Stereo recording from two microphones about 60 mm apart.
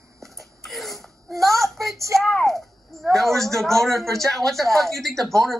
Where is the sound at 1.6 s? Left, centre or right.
Right.